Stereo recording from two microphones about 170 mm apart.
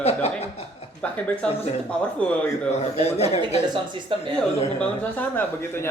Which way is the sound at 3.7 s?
30° right (ahead or behind).